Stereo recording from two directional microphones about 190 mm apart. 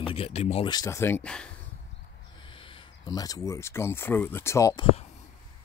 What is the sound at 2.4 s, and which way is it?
Speech, 25° left (ahead or behind).